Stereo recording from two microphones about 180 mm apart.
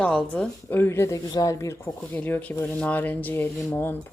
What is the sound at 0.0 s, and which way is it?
A woman's voice, 5° left (ahead or behind).